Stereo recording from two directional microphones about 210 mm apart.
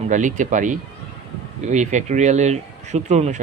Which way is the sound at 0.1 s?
35° right (ahead or behind).